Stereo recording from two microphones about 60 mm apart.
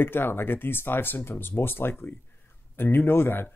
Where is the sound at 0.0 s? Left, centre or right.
Left.